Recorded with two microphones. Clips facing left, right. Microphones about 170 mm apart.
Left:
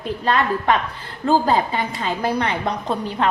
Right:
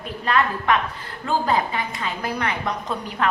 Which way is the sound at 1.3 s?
30° left (ahead or behind).